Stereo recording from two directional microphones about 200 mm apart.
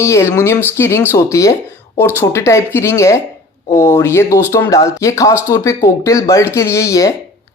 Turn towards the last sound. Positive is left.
turn(degrees=15)  # may be behind; listen again after turning